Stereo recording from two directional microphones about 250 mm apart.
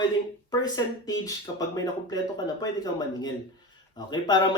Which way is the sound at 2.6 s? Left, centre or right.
Centre.